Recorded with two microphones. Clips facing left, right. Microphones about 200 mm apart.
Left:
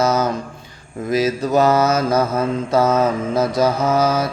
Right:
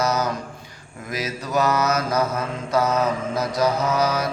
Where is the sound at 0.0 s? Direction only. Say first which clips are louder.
Left 5 dB; 25° left (ahead or behind).